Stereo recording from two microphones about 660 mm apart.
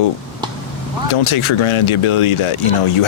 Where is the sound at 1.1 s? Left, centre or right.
Left.